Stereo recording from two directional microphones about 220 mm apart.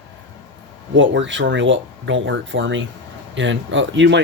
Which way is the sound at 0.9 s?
55° right (ahead or behind).